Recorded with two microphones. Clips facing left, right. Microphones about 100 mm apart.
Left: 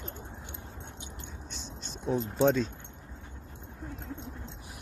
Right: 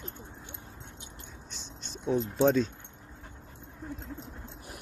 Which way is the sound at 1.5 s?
Centre (ahead or behind).